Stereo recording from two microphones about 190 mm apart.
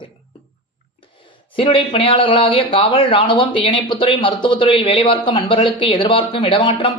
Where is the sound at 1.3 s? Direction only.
25° left (ahead or behind).